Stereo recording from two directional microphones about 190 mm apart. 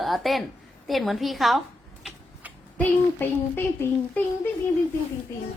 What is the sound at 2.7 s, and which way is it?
A child's voice, 10° left (ahead or behind).